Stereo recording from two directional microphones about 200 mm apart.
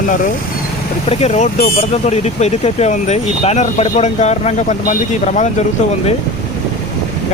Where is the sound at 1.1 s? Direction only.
30° left (ahead or behind).